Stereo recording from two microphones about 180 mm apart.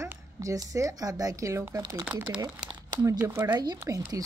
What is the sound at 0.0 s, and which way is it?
A woman's voice, 15° right (ahead or behind).